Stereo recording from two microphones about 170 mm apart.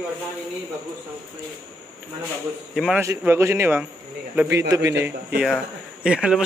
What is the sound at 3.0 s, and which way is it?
Speech, 15° right (ahead or behind).